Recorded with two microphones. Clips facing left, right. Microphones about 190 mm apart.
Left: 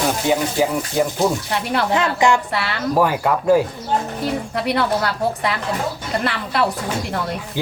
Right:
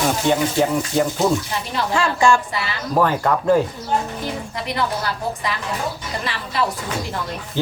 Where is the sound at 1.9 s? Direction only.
20° left (ahead or behind).